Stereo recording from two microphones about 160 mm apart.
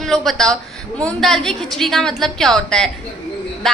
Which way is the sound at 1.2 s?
Centre (ahead or behind).